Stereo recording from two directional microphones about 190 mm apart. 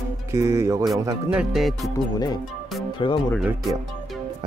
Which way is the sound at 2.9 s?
25° left (ahead or behind).